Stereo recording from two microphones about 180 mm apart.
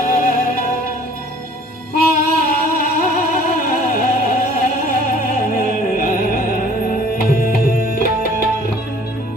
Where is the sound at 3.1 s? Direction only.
55° left (ahead or behind).